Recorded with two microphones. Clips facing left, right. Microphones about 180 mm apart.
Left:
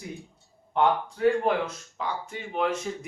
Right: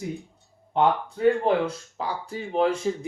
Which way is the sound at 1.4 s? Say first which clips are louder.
Right 3 dB; 30° right (ahead or behind).